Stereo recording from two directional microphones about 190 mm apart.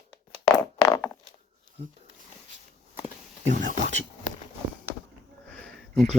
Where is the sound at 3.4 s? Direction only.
40° right (ahead or behind).